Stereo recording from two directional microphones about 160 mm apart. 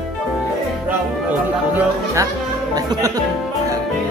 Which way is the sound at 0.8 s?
10° right (ahead or behind).